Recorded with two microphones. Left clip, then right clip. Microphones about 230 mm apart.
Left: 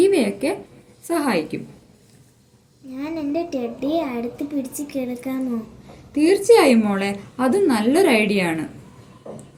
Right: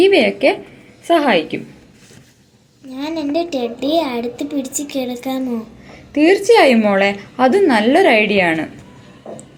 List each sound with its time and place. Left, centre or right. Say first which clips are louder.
0.0 s a sound: right 6 dB; left
1.0 s a woman's voice: right 8 dB; centre
2.9 s a woman's voice: right 5 dB; centre